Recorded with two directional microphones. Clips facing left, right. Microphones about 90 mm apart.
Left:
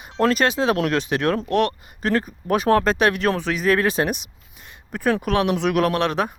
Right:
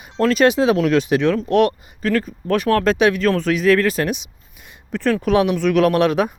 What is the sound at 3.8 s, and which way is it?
Speech, 20° left (ahead or behind).